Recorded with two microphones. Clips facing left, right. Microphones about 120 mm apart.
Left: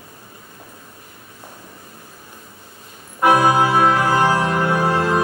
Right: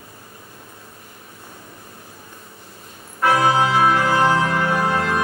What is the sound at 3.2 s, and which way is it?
Organ, 20° left (ahead or behind).